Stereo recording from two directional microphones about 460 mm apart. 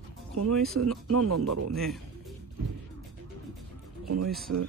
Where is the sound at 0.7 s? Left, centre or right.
Right.